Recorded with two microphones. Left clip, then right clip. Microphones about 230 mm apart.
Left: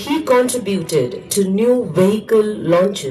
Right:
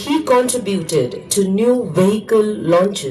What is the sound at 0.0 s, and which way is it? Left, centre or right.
A woman's voice, centre.